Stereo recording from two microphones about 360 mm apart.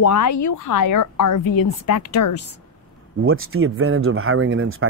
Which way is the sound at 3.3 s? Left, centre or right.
Right.